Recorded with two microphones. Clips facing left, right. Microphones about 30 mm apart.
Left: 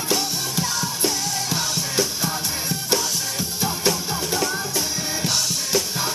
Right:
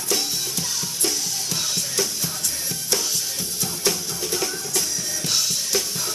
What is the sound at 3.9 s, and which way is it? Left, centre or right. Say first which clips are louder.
Music: left 1 dB; centre.